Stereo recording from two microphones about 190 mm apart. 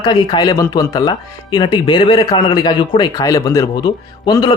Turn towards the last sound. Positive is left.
turn(degrees=20)  # may be behind; listen again after turning